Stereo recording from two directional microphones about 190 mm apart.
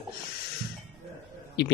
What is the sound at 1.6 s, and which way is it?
Speech, 65° left (ahead or behind).